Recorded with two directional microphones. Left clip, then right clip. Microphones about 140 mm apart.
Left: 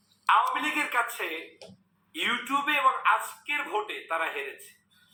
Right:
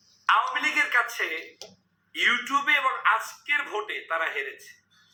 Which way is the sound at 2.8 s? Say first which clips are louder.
Even; 35° right (ahead or behind).